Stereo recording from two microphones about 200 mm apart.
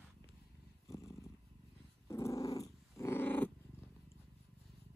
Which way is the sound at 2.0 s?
15° left (ahead or behind).